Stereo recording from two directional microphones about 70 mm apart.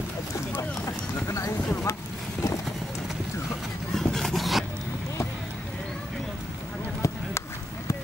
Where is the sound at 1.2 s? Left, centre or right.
Left.